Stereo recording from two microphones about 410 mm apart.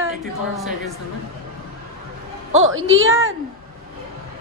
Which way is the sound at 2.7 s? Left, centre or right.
Right.